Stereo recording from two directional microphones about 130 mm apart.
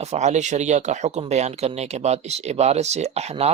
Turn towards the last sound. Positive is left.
turn(degrees=-55)  # may be behind; listen again after turning